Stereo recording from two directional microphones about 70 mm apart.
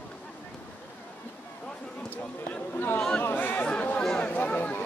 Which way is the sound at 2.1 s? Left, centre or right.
Left.